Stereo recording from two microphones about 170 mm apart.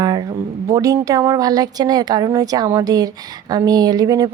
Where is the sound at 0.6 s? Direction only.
20° right (ahead or behind).